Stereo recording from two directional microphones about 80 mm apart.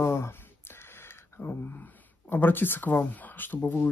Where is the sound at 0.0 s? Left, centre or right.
Left.